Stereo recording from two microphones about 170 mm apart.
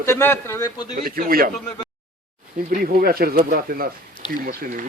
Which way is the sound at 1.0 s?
60° right (ahead or behind).